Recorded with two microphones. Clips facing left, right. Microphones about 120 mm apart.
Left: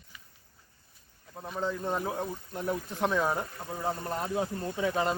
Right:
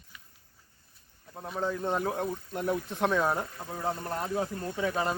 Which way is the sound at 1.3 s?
5° right (ahead or behind).